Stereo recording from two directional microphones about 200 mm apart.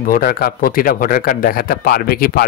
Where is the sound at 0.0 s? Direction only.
45° left (ahead or behind).